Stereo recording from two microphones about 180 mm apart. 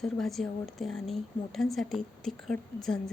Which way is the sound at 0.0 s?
Centre (ahead or behind).